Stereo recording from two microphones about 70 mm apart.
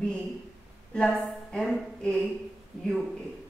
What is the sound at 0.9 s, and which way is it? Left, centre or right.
A woman's voice, centre.